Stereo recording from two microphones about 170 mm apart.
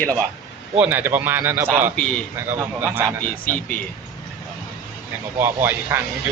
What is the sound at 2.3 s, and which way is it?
Speech, 10° right (ahead or behind).